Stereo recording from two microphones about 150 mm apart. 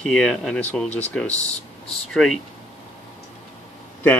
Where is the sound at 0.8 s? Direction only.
45° left (ahead or behind).